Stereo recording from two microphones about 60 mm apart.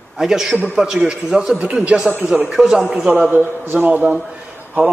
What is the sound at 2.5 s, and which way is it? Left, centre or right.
Speech, centre.